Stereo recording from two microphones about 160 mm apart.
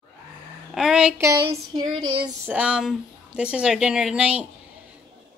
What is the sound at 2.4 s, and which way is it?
A woman's voice, 10° right (ahead or behind).